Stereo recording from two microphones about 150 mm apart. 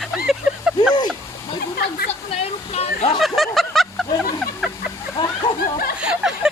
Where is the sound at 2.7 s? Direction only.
45° left (ahead or behind).